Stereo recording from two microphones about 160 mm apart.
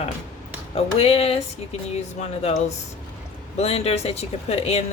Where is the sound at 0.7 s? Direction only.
40° left (ahead or behind).